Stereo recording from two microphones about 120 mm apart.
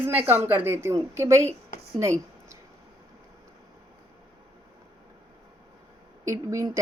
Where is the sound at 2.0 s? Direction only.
25° right (ahead or behind).